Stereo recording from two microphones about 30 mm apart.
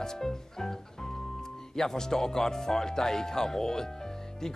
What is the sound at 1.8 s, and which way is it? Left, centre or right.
Speech, centre.